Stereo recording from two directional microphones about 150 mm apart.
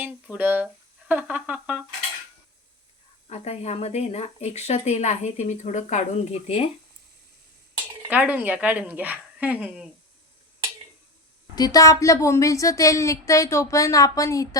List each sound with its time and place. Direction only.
0.0 s music: 10° right (ahead or behind)
3.2 s speech: 45° left (ahead or behind)
8.1 s speech: 10° right (ahead or behind)
11.5 s a woman's voice: 25° left (ahead or behind)